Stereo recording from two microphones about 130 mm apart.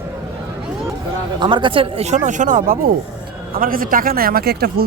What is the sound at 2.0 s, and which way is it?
Speech, 65° right (ahead or behind).